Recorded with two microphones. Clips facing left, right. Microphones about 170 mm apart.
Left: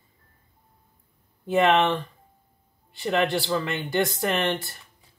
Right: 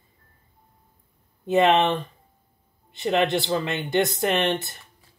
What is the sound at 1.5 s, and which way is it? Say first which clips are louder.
Speech: right 1 dB; 20° right (ahead or behind).